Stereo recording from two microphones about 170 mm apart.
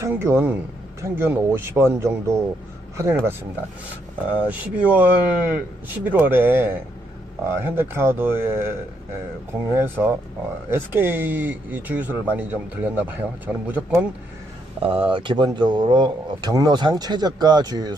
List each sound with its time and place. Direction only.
0.0 s speech: 15° right (ahead or behind)
4.4 s speech: 10° right (ahead or behind)
14.8 s speech: 30° right (ahead or behind)